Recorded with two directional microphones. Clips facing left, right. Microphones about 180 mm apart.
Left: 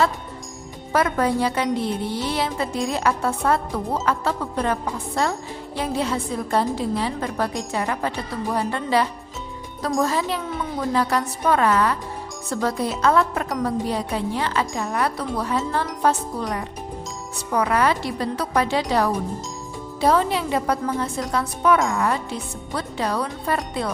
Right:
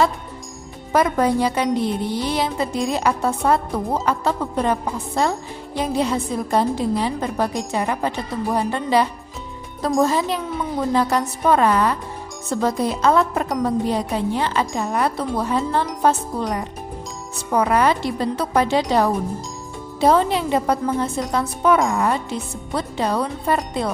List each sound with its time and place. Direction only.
0.9 s a woman's voice: 15° right (ahead or behind)
17.5 s a woman's voice: 25° right (ahead or behind)